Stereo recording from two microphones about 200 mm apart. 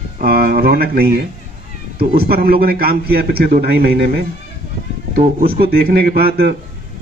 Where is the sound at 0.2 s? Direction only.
50° right (ahead or behind).